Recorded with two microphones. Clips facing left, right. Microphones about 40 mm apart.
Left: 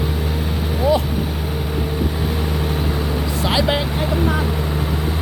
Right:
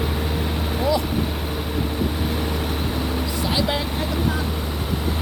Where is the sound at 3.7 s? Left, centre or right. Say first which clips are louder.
Left 4 dB; left.